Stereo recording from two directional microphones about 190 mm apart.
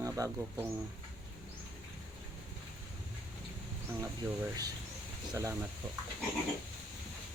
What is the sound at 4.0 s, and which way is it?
Speech, 15° right (ahead or behind).